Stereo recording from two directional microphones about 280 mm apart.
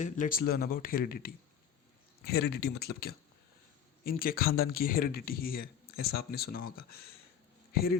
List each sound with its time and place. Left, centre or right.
0.0 s speech: left
2.5 s speech: left